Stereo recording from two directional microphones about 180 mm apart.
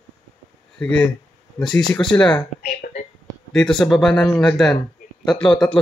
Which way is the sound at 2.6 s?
50° left (ahead or behind).